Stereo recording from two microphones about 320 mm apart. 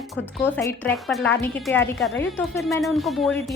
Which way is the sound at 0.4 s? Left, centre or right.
Centre.